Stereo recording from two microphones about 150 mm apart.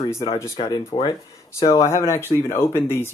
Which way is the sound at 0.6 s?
35° left (ahead or behind).